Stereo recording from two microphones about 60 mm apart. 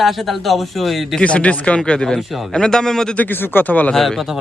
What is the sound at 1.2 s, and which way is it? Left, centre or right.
Speech, left.